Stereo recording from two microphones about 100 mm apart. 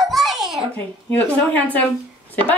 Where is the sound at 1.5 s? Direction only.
15° left (ahead or behind).